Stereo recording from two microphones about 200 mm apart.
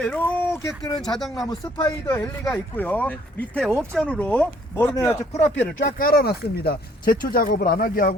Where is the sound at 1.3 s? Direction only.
20° left (ahead or behind).